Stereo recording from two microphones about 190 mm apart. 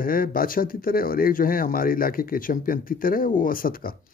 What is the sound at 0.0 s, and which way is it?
Speech, 50° left (ahead or behind).